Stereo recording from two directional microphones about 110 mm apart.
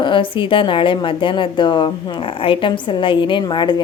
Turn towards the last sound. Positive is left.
turn(degrees=45)  # may be behind; listen again after turning